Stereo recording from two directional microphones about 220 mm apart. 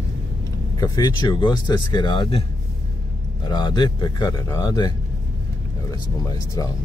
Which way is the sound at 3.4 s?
20° left (ahead or behind).